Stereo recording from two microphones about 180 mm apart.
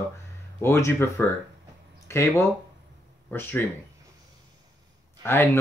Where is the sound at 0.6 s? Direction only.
15° left (ahead or behind).